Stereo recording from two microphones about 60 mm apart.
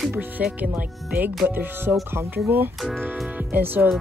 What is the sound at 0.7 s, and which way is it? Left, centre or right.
Speech, right.